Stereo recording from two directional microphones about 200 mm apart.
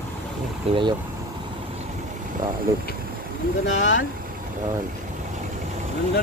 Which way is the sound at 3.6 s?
70° left (ahead or behind).